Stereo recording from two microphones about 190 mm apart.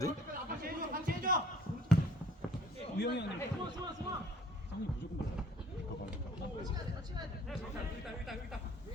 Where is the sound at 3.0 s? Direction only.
65° left (ahead or behind).